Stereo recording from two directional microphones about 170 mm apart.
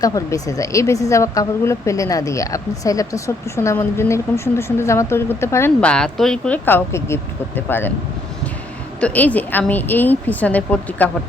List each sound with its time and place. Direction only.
0.0 s speech: 20° left (ahead or behind)
9.0 s speech: 10° left (ahead or behind)